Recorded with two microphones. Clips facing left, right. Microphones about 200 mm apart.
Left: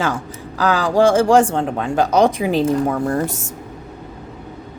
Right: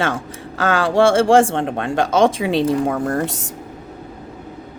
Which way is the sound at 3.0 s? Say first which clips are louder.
Left 1 dB; 60° right (ahead or behind).